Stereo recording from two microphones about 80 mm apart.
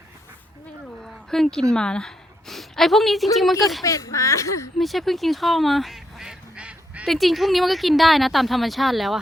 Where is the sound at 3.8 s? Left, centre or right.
Left.